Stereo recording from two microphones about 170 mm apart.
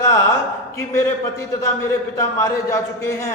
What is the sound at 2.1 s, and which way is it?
A man's voice, 15° left (ahead or behind).